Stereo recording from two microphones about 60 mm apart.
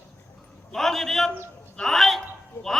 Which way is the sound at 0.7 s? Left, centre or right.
Centre.